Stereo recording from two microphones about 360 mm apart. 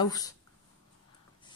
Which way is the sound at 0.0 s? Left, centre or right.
Centre.